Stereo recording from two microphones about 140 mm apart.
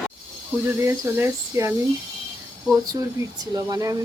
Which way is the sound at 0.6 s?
15° right (ahead or behind).